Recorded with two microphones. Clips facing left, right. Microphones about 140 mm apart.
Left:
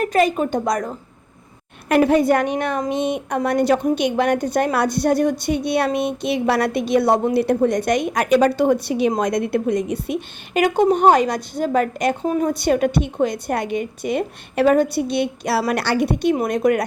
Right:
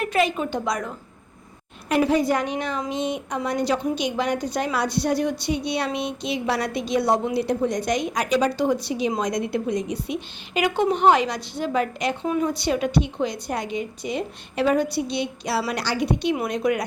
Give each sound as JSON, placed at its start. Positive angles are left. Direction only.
{"t": 0.0, "sound": "a woman's voice", "side_deg": 45}
{"t": 1.9, "sound": "a woman's voice", "side_deg": 55}